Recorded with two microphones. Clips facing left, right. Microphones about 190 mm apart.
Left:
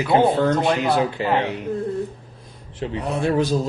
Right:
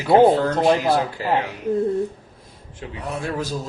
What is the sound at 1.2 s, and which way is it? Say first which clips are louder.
Speech: left 1 dB; 20° left (ahead or behind).